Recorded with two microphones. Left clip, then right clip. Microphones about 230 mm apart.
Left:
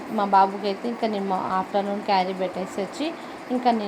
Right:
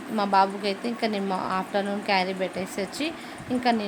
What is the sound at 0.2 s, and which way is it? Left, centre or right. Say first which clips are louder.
Speech: left 3 dB; centre.